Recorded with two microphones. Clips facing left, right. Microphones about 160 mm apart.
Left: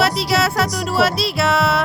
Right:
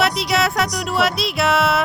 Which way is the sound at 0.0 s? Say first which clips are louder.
Left 1 dB; centre (ahead or behind).